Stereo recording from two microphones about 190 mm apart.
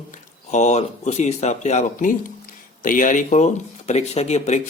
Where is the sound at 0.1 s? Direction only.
35° left (ahead or behind).